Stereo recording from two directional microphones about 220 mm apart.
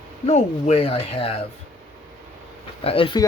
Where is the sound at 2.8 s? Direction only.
25° left (ahead or behind).